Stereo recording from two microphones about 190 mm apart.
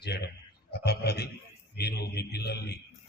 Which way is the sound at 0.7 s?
55° left (ahead or behind).